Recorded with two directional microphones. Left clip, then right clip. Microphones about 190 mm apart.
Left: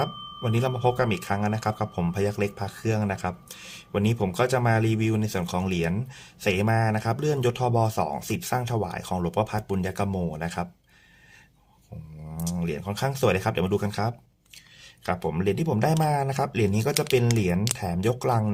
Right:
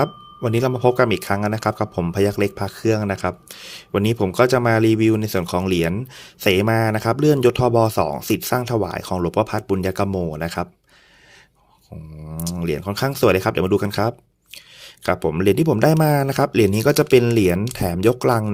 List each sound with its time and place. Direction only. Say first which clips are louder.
0.0 s speech: right 7 dB; 35° right (ahead or behind)
12.4 s speech: right 7 dB; 35° right (ahead or behind)